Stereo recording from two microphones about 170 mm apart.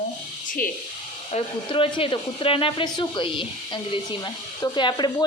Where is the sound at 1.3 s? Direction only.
35° left (ahead or behind).